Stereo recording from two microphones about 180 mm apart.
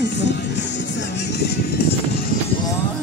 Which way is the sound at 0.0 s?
75° left (ahead or behind).